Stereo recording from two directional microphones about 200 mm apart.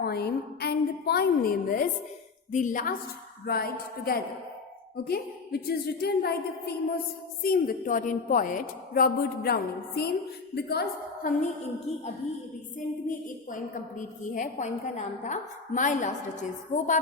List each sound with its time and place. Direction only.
0.0 s a woman's voice: 55° left (ahead or behind)
11.9 s a woman's voice: 30° left (ahead or behind)
13.1 s a woman's voice: 40° left (ahead or behind)